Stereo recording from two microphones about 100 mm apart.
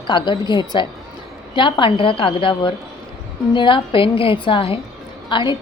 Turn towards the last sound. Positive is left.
turn(degrees=55)  # may be behind; listen again after turning